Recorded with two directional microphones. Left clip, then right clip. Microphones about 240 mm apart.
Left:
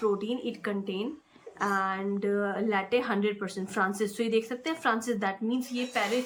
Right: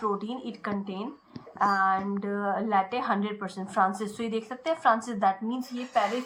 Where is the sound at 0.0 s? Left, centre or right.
Centre.